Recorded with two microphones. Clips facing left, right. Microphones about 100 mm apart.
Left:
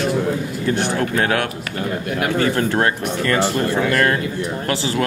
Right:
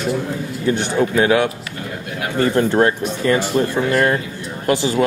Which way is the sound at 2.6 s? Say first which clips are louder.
Right 3 dB; 15° right (ahead or behind).